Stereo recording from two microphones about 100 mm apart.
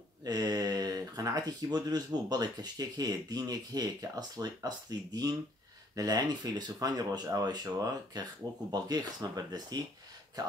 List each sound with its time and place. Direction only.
0.2 s speech: 40° right (ahead or behind)